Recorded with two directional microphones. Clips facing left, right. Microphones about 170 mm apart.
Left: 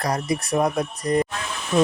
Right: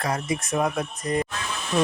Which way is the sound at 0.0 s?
35° left (ahead or behind).